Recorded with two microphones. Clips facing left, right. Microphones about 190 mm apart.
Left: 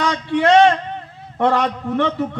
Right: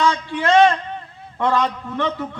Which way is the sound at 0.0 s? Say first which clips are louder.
Left 2 dB; 65° left (ahead or behind).